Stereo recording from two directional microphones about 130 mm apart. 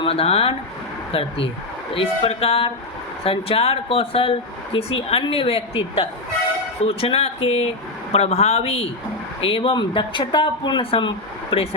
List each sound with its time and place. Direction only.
0.0 s speech: 45° left (ahead or behind)